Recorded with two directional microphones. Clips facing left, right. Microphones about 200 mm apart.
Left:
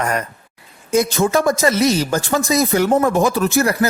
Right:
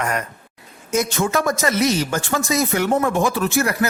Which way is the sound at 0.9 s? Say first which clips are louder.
Left 4 dB; 35° left (ahead or behind).